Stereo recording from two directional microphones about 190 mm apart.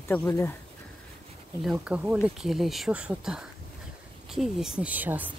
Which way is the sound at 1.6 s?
5° right (ahead or behind).